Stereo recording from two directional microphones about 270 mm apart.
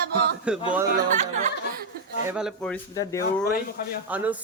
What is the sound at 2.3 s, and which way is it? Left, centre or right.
Speech, centre.